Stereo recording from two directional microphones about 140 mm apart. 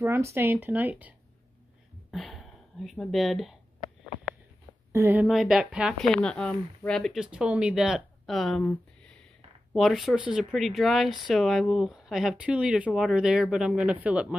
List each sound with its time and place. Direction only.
0.0 s speech: 15° right (ahead or behind)
2.0 s speech: centre (ahead or behind)
4.9 s a woman's voice: 15° right (ahead or behind)
5.2 s speech: centre (ahead or behind)